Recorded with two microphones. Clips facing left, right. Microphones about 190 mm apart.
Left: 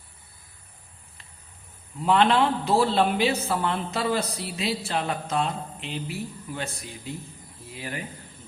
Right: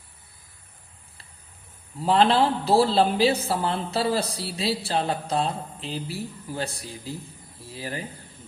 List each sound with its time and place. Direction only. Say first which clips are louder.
2.0 s a man's voice: right 1 dB; 35° right (ahead or behind)